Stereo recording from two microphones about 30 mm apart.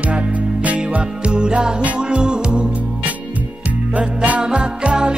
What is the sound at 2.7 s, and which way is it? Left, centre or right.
Music, right.